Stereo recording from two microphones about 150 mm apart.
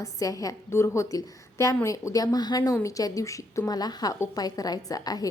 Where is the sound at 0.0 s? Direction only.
25° left (ahead or behind).